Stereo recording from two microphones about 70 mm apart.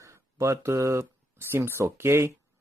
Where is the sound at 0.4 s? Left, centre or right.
Right.